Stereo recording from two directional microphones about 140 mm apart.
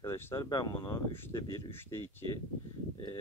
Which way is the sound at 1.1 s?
15° left (ahead or behind).